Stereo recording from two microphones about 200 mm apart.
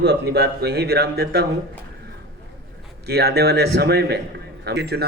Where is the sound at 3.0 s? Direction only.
55° right (ahead or behind).